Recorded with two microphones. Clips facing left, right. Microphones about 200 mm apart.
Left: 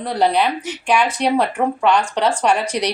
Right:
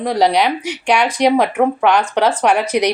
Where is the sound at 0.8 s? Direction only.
70° right (ahead or behind).